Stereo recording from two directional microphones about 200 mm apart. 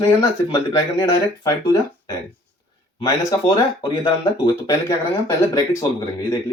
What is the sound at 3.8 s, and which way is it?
Speech, 20° left (ahead or behind).